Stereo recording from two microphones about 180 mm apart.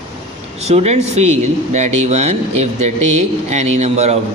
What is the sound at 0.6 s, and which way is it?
A man's voice, 35° right (ahead or behind).